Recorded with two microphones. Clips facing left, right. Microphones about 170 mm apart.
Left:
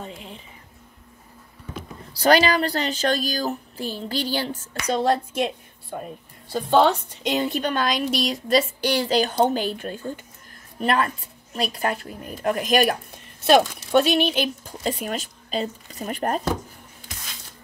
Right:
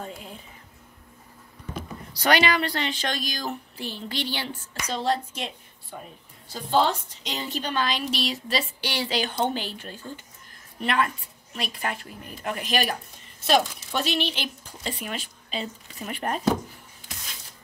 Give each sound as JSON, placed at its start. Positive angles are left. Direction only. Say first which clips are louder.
{"t": 2.1, "sound": "a woman's voice", "louder": "left 4 dB", "side_deg": 35}
{"t": 10.8, "sound": "a woman's voice", "louder": "left 3 dB", "side_deg": 40}
{"t": 13.5, "sound": "a woman's voice", "louder": "left 6 dB", "side_deg": 60}